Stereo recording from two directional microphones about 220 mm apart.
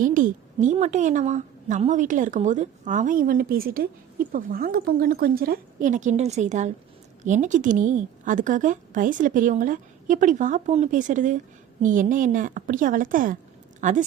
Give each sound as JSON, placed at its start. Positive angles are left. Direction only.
{"t": 0.0, "sound": "a woman's voice", "side_deg": -35}